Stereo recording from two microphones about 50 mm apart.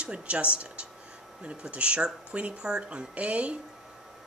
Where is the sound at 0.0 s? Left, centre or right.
Right.